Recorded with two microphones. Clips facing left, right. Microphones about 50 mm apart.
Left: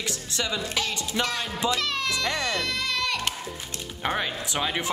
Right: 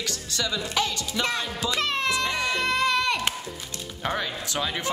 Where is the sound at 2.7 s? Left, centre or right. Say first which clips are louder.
Right 6 dB; right.